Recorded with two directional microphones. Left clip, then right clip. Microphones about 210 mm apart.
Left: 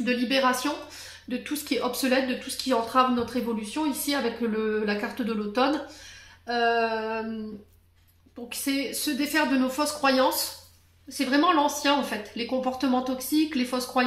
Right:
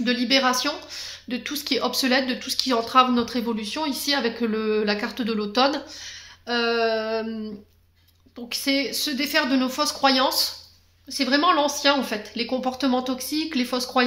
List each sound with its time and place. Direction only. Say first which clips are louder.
0.0 s speech: right 3 dB; 40° right (ahead or behind)
8.5 s a woman's voice: right 5 dB; 40° right (ahead or behind)